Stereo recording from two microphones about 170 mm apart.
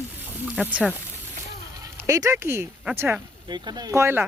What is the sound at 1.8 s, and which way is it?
Speech, 20° right (ahead or behind).